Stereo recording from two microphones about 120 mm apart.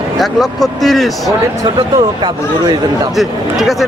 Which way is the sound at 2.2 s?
35° right (ahead or behind).